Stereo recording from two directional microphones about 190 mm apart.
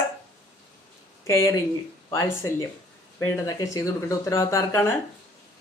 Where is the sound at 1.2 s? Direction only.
15° left (ahead or behind).